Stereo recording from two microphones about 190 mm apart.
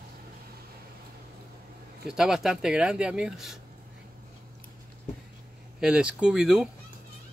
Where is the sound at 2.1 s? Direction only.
Centre (ahead or behind).